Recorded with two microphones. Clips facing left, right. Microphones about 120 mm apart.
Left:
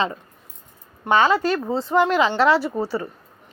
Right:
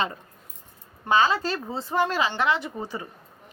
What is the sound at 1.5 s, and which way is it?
Speech, 90° left.